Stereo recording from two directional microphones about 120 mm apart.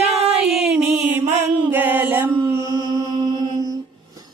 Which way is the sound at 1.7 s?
15° right (ahead or behind).